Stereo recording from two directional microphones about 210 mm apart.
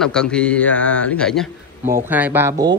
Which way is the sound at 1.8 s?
40° right (ahead or behind).